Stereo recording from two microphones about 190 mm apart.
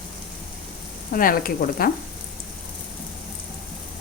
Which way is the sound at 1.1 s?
45° left (ahead or behind).